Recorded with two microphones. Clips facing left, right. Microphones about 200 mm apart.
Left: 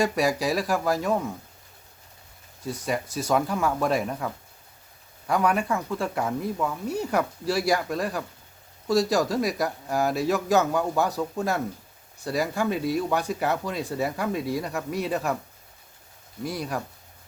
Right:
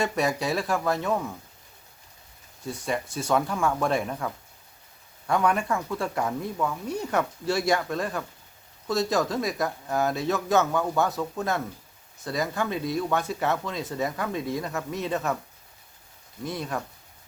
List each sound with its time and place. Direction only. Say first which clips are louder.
0.0 s speech: left 2 dB; 10° left (ahead or behind)
2.6 s speech: left 1 dB; 5° left (ahead or behind)
5.3 s speech: left 1 dB; 5° left (ahead or behind)
16.4 s speech: left 1 dB; 5° left (ahead or behind)